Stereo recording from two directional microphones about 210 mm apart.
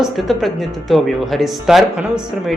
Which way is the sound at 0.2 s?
Centre (ahead or behind).